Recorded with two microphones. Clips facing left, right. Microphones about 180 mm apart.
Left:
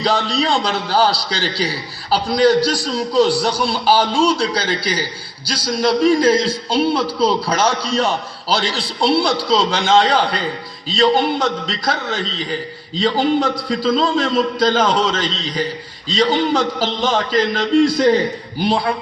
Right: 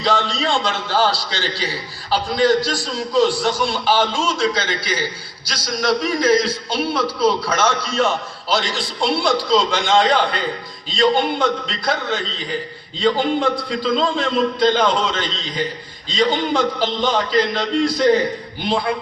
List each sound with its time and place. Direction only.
0.0 s a man's voice: 40° left (ahead or behind)